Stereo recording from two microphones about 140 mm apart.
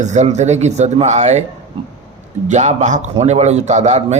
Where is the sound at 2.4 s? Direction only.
55° right (ahead or behind).